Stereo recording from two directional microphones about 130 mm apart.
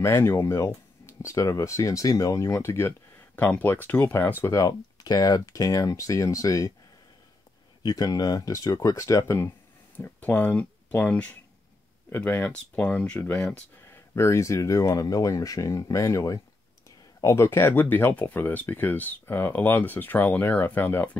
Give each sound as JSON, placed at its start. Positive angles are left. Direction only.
{"t": 0.0, "sound": "speech", "side_deg": 20}
{"t": 7.8, "sound": "speech", "side_deg": 30}
{"t": 9.9, "sound": "speech", "side_deg": 15}
{"t": 14.1, "sound": "speech", "side_deg": 20}